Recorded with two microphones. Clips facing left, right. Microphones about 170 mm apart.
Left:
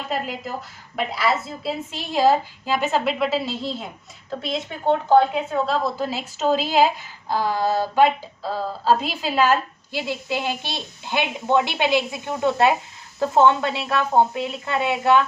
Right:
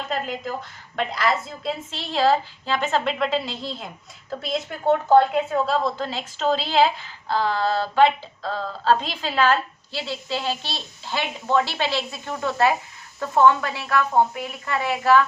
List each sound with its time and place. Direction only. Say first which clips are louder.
0.1 s a woman's voice: left 1 dB; 5° left (ahead or behind); by 15.3 s 20° left (ahead or behind)